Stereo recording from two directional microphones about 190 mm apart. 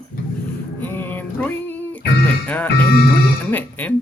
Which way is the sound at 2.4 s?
10° left (ahead or behind).